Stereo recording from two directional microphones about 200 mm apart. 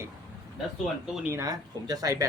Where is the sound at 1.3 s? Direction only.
20° right (ahead or behind).